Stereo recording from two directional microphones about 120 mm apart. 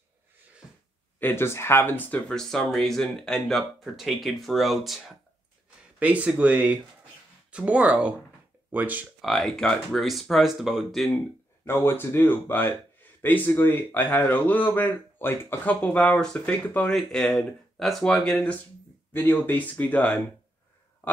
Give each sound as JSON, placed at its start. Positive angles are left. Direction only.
{"t": 1.2, "sound": "speech", "side_deg": 20}
{"t": 5.9, "sound": "speech", "side_deg": -10}
{"t": 9.2, "sound": "speech", "side_deg": 0}
{"t": 11.6, "sound": "speech", "side_deg": 20}
{"t": 16.9, "sound": "speech", "side_deg": 0}